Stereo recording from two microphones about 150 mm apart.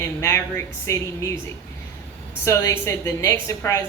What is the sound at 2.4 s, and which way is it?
A woman's voice, 20° left (ahead or behind).